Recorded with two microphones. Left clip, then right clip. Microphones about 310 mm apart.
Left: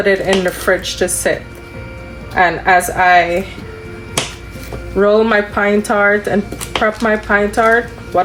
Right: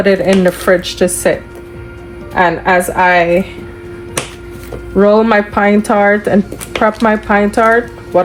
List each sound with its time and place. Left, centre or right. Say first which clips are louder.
0.0 s speech: right 3 dB; centre
2.3 s a woman's voice: right 1 dB; centre
4.9 s speech: right 2 dB; centre